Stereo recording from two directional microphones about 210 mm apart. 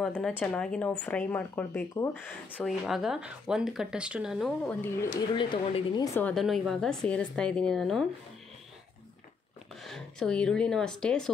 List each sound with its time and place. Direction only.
0.0 s speech: centre (ahead or behind)
2.5 s speech: centre (ahead or behind)
5.3 s speech: 20° left (ahead or behind)
6.1 s speech: 5° left (ahead or behind)
9.8 s speech: centre (ahead or behind)